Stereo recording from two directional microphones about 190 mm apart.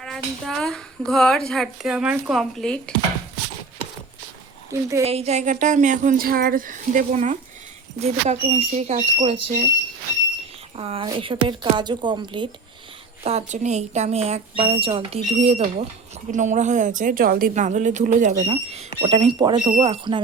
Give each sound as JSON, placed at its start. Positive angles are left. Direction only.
{"t": 0.0, "sound": "a child's voice", "side_deg": 0}
{"t": 4.7, "sound": "a woman's voice", "side_deg": -15}
{"t": 5.0, "sound": "a woman's voice", "side_deg": -35}
{"t": 10.8, "sound": "a woman's voice", "side_deg": -30}
{"t": 13.2, "sound": "a woman's voice", "side_deg": -35}